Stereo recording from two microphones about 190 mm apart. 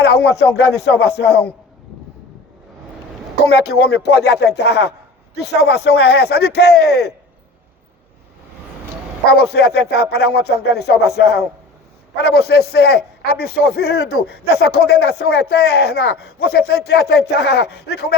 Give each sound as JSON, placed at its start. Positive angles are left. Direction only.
{"t": 0.0, "sound": "speech", "side_deg": 60}
{"t": 3.8, "sound": "speech", "side_deg": 60}
{"t": 9.3, "sound": "speech", "side_deg": 55}